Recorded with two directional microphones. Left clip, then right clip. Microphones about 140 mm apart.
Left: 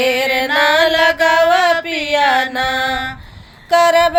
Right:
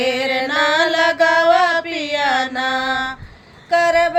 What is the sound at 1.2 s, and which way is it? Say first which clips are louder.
Music: right 2 dB; 30° left (ahead or behind).